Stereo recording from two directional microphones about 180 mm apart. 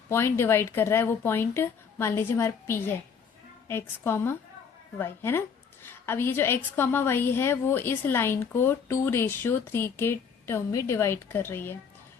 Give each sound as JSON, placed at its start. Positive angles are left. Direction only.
{"t": 0.1, "sound": "a woman's voice", "side_deg": 15}